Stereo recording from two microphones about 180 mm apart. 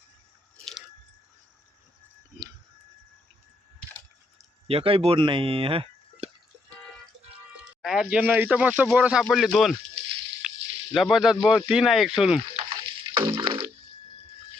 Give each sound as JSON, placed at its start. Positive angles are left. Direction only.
{"t": 4.7, "sound": "speech", "side_deg": -30}
{"t": 7.5, "sound": "speech", "side_deg": 0}
{"t": 10.4, "sound": "a sound", "side_deg": -5}
{"t": 10.9, "sound": "speech", "side_deg": 0}
{"t": 12.8, "sound": "music", "side_deg": -25}